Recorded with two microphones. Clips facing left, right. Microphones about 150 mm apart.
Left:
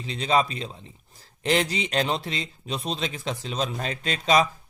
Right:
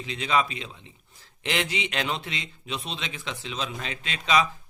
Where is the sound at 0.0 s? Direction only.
35° left (ahead or behind).